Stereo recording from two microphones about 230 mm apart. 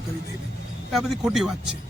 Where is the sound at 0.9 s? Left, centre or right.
Centre.